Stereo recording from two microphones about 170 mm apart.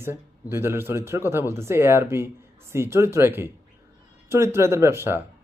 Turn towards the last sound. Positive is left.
turn(degrees=-15)  # may be behind; listen again after turning